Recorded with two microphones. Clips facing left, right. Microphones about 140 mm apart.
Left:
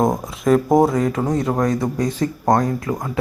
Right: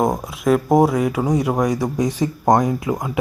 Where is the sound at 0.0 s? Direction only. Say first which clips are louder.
Left 1 dB; 5° right (ahead or behind).